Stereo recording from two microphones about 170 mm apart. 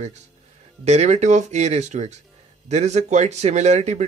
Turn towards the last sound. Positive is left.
turn(degrees=-40)  # may be behind; listen again after turning